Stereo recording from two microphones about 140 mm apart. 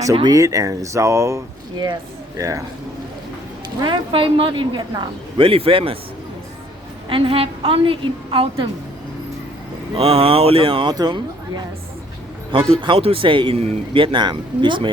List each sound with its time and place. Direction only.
0.0 s speech: 25° right (ahead or behind)
2.4 s speech: 25° right (ahead or behind)
3.8 s a woman's voice: 35° right (ahead or behind)
7.1 s a woman's voice: 40° right (ahead or behind)
9.9 s a woman's voice: 45° right (ahead or behind)
12.8 s a woman's voice: 40° right (ahead or behind)